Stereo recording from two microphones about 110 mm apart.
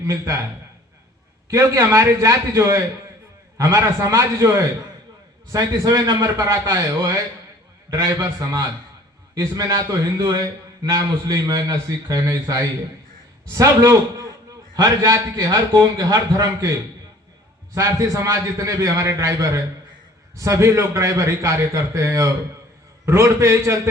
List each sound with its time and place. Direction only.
0.0 s a man's voice: 30° right (ahead or behind)
1.5 s a man's voice: 30° right (ahead or behind)
17.7 s a man's voice: 30° right (ahead or behind)